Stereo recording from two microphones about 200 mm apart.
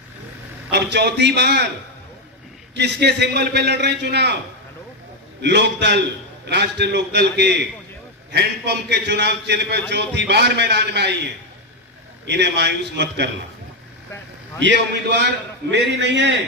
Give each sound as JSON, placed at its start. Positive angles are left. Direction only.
{"t": 0.7, "sound": "a man's voice", "side_deg": -55}
{"t": 2.7, "sound": "a man's voice", "side_deg": -60}
{"t": 5.4, "sound": "a man's voice", "side_deg": -60}
{"t": 12.3, "sound": "a man's voice", "side_deg": -60}
{"t": 14.6, "sound": "a man's voice", "side_deg": -60}